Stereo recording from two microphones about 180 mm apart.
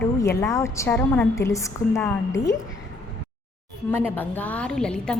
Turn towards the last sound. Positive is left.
turn(degrees=5)  # may be behind; listen again after turning